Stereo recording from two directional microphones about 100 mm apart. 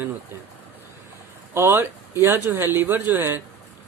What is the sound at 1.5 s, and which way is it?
Speech, 25° right (ahead or behind).